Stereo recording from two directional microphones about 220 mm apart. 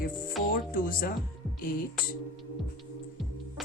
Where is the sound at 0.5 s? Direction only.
40° left (ahead or behind).